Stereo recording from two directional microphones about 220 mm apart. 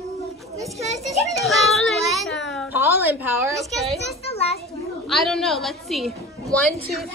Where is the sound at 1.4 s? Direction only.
Centre (ahead or behind).